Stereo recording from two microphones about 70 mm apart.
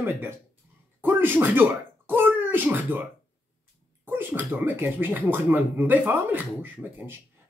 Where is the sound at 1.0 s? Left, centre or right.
Right.